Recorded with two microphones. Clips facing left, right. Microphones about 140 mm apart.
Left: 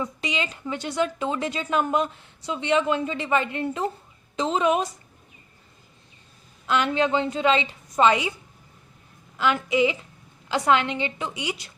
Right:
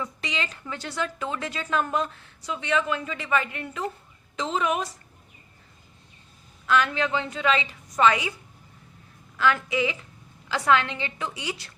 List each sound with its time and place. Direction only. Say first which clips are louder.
0.0 s speech: left 3 dB; 20° left (ahead or behind)
6.7 s speech: left 2 dB; 25° left (ahead or behind)
9.4 s speech: left 2 dB; 20° left (ahead or behind)